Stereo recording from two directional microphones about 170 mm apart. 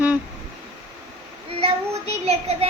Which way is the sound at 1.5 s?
35° right (ahead or behind).